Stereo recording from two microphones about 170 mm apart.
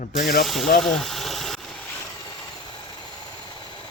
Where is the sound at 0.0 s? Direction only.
55° left (ahead or behind).